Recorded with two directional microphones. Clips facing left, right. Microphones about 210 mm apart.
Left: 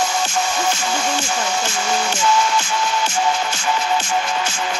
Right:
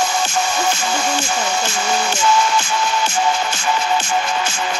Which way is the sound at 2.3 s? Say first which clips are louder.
Right 2 dB; 60° right (ahead or behind).